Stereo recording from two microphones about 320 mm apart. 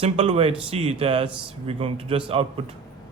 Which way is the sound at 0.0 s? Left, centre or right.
Centre.